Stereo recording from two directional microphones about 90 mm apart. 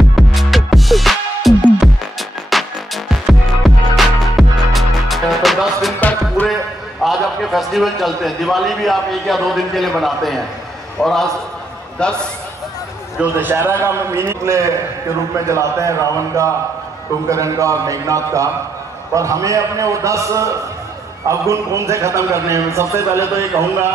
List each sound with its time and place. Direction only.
0.1 s music: centre (ahead or behind)
5.9 s music: 20° left (ahead or behind)
7.0 s a sound: centre (ahead or behind)
11.0 s a man's voice: 5° left (ahead or behind)
13.2 s a man's voice: 20° right (ahead or behind)